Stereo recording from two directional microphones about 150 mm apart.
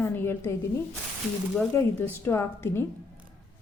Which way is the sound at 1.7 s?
15° left (ahead or behind).